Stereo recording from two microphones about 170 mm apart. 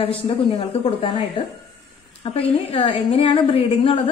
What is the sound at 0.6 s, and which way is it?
A woman's voice, 35° left (ahead or behind).